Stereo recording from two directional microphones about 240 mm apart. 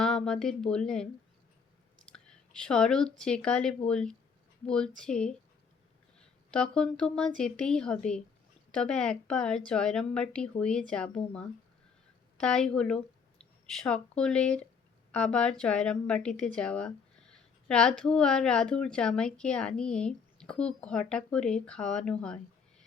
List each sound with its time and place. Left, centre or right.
0.0 s speech: centre
2.0 s speech: centre
6.5 s speech: centre
12.4 s speech: centre